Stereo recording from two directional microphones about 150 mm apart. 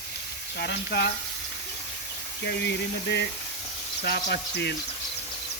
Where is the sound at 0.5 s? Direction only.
90° left.